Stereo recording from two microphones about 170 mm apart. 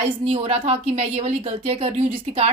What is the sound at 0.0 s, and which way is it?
A woman's voice, 35° right (ahead or behind).